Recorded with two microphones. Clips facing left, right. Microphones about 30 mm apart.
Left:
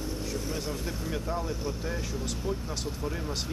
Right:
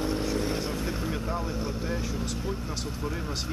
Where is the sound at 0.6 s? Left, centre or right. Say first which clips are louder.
Right 3 dB; right.